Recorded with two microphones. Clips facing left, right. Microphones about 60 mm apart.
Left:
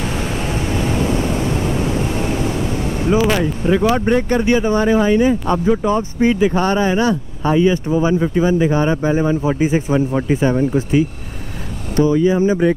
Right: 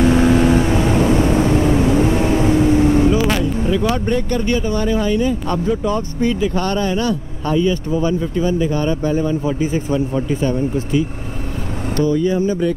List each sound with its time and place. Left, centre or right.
0.1 s vehicle: right
3.1 s vehicle: left
3.8 s speech: left